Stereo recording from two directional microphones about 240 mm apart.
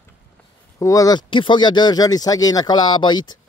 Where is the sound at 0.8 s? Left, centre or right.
Centre.